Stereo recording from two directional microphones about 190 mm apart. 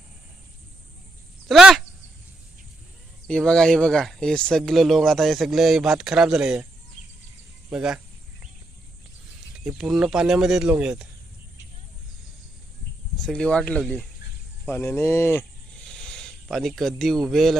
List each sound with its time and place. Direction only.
1.5 s speech: centre (ahead or behind)
3.2 s speech: 5° left (ahead or behind)
7.7 s speech: 5° right (ahead or behind)
9.6 s speech: 5° right (ahead or behind)
13.1 s speech: 5° left (ahead or behind)
14.7 s a sound: 15° left (ahead or behind)
17.2 s speech: centre (ahead or behind)